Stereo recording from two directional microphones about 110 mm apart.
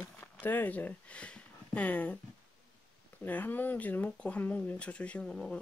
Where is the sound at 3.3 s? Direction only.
15° left (ahead or behind).